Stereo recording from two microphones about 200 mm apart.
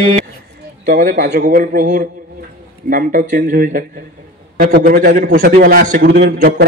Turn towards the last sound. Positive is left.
turn(degrees=-55)  # may be behind; listen again after turning